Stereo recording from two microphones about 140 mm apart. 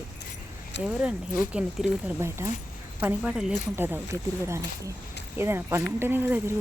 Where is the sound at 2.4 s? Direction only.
20° right (ahead or behind).